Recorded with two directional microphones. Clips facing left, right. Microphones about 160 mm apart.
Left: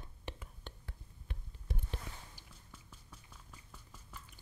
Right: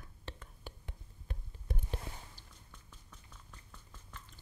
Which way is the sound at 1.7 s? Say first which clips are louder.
Right 2 dB; 50° right (ahead or behind).